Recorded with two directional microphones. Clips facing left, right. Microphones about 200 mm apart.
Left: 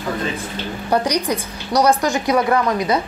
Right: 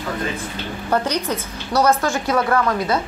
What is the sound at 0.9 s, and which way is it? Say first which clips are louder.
A woman's voice: left 2 dB; 15° left (ahead or behind).